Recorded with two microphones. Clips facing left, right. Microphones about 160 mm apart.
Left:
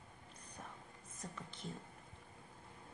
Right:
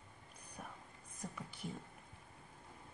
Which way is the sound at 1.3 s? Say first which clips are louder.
Right 1 dB; 10° right (ahead or behind).